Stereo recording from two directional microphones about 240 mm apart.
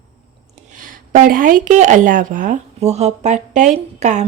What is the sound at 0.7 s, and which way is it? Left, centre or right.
Speech, right.